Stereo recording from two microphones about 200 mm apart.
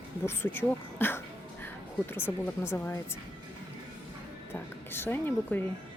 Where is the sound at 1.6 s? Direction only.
10° left (ahead or behind).